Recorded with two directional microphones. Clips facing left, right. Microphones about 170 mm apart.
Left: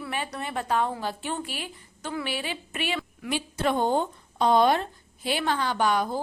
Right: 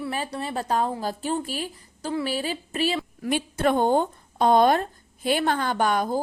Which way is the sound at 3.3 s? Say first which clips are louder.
Right 4 dB; 50° right (ahead or behind).